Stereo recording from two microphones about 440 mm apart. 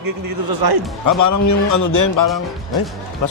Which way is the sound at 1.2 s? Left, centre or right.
Left.